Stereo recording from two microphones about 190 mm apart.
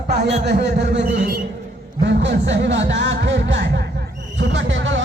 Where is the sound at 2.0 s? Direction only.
70° right (ahead or behind).